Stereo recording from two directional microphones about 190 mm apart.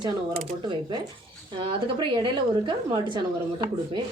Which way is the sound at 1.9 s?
25° right (ahead or behind).